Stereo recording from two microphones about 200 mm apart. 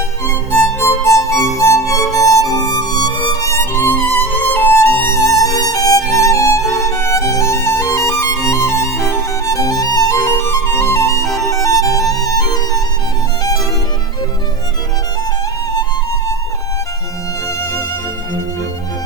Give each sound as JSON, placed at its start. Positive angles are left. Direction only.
{"t": 0.3, "sound": "music", "side_deg": 15}